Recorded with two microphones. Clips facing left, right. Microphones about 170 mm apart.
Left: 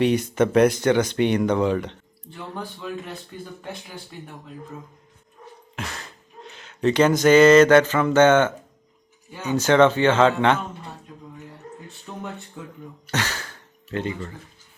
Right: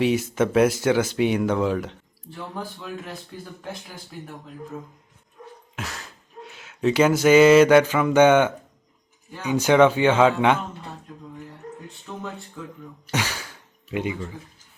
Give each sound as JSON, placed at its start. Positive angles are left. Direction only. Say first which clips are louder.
{"t": 0.0, "sound": "speech", "louder": "left 1 dB", "side_deg": -5}
{"t": 5.7, "sound": "speech", "louder": "left 1 dB", "side_deg": 0}
{"t": 12.1, "sound": "a sound", "louder": "even", "side_deg": 5}
{"t": 12.6, "sound": "speech", "louder": "right 1 dB", "side_deg": 20}
{"t": 13.1, "sound": "gasp", "louder": "even", "side_deg": -10}